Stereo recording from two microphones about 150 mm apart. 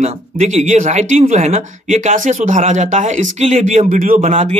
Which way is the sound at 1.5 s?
50° right (ahead or behind).